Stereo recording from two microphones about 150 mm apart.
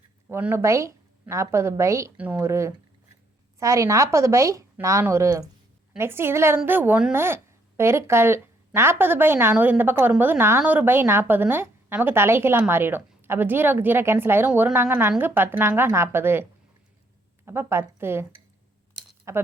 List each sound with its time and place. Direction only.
0.3 s a woman's voice: 15° right (ahead or behind)
19.3 s a woman's voice: 20° right (ahead or behind)